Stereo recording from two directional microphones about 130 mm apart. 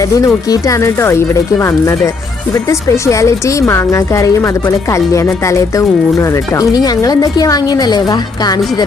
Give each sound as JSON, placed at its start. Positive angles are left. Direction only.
{"t": 0.0, "sound": "a woman's voice", "side_deg": 25}